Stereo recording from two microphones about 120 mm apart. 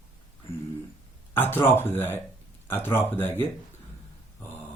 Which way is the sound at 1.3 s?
15° left (ahead or behind).